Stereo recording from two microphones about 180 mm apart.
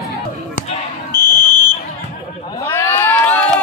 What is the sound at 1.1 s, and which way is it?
Fire alarm, 20° right (ahead or behind).